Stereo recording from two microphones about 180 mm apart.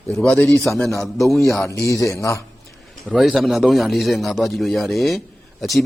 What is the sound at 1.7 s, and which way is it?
Speech, 15° left (ahead or behind).